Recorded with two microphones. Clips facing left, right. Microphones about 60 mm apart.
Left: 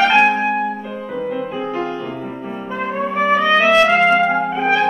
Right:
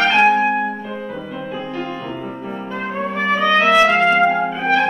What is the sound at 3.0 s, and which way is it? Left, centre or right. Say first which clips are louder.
Trumpet: left 2 dB; centre.